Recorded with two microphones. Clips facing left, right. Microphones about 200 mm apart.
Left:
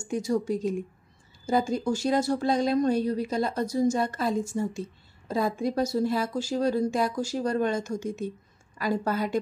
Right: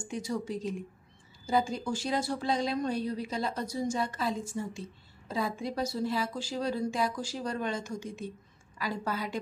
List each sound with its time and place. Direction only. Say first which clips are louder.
0.0 s speech: left 7 dB; 45° left (ahead or behind)